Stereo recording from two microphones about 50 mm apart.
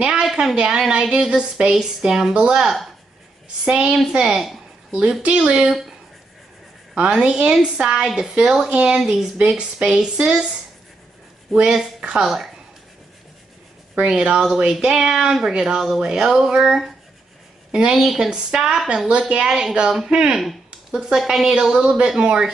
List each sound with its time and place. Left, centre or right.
0.1 s a sound: centre
0.6 s speech: centre
7.0 s speech: centre
8.0 s speech: centre
11.7 s speech: centre
13.9 s speech: right
14.4 s speech: centre
17.6 s a woman's voice: centre
17.9 s speech: centre
18.3 s speech: centre
20.3 s a sound: centre
21.3 s speech: centre